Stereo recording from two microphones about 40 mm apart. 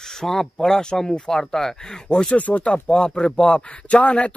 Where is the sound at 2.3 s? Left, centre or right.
Left.